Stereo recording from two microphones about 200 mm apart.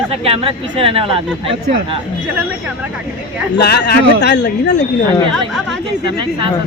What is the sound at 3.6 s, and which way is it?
Speech, 55° left (ahead or behind).